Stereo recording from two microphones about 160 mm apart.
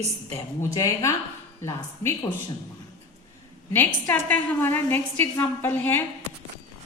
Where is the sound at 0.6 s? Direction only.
20° left (ahead or behind).